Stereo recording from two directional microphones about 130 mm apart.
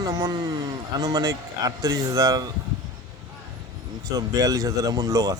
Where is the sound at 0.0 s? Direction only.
30° right (ahead or behind).